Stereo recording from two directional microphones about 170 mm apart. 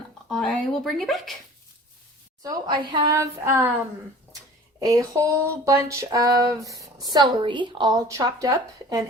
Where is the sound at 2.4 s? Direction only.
25° right (ahead or behind).